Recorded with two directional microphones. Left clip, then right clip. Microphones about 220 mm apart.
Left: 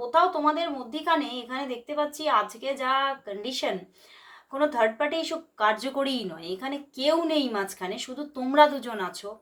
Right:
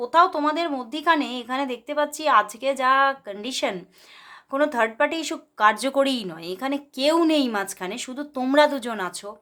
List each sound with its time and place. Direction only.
0.1 s speech: 45° right (ahead or behind)